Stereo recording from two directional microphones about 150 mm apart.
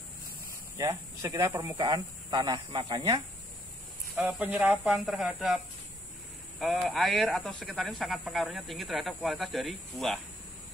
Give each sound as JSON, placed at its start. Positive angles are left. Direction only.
{"t": 0.7, "sound": "speech", "side_deg": -20}
{"t": 4.1, "sound": "speech", "side_deg": -5}
{"t": 6.6, "sound": "speech", "side_deg": 0}